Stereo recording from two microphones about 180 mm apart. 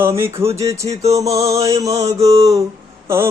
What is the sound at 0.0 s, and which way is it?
Music, 15° right (ahead or behind).